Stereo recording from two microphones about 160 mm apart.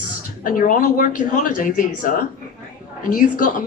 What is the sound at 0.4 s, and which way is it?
A woman's voice, 55° left (ahead or behind).